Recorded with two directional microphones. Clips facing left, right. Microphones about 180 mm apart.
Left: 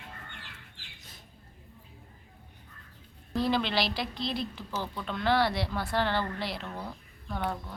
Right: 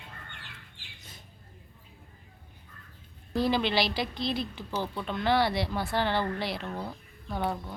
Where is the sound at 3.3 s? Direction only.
Centre (ahead or behind).